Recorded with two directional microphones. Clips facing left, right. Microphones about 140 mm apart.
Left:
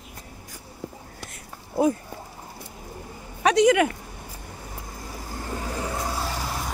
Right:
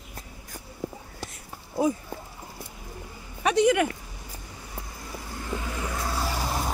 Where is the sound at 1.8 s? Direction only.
65° left (ahead or behind).